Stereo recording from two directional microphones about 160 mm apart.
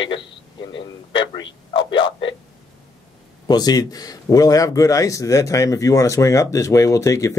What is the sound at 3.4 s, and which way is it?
Speech, 25° left (ahead or behind).